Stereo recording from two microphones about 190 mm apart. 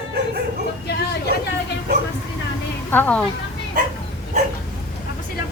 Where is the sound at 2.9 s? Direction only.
10° left (ahead or behind).